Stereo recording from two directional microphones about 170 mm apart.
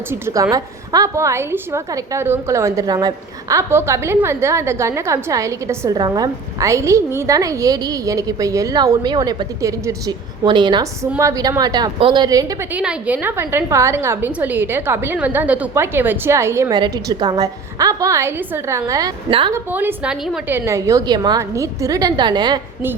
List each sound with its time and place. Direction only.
0.1 s a woman's voice: 15° right (ahead or behind)
12.7 s a woman's voice: 5° right (ahead or behind)
19.3 s a woman's voice: 30° right (ahead or behind)
19.5 s a woman's voice: 10° right (ahead or behind)
20.6 s a woman's voice: 15° right (ahead or behind)